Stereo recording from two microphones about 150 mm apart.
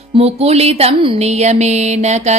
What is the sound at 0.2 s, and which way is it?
Music, 45° right (ahead or behind).